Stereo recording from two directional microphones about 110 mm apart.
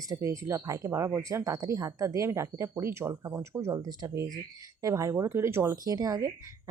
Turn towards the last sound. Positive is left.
turn(degrees=-25)  # may be behind; listen again after turning